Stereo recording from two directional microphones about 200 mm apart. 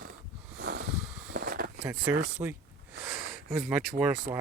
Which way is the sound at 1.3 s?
45° right (ahead or behind).